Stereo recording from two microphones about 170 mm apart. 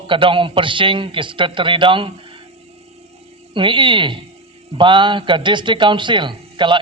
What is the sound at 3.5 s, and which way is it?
A man's voice, 30° right (ahead or behind).